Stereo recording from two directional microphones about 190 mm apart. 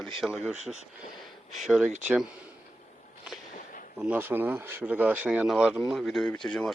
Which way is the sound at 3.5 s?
45° left (ahead or behind).